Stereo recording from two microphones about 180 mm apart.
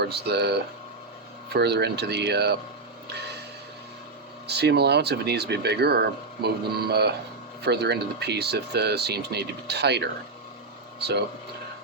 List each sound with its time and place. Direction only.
0.0 s speech: 65° right (ahead or behind)
4.4 s speech: 65° right (ahead or behind)